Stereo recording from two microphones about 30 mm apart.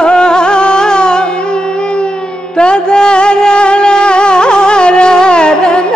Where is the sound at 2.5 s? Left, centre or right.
Left.